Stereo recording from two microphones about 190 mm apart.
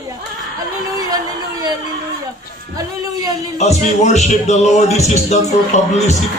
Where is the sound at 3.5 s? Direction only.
35° left (ahead or behind).